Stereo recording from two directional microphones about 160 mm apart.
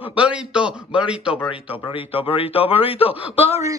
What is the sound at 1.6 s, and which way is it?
Speech, 35° left (ahead or behind).